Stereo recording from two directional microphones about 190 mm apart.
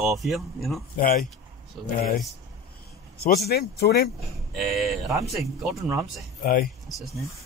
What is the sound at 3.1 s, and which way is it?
Speech, 55° left (ahead or behind).